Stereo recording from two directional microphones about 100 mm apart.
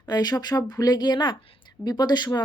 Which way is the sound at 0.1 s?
40° left (ahead or behind).